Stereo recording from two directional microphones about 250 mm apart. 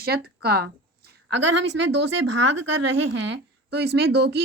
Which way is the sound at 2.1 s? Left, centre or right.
Right.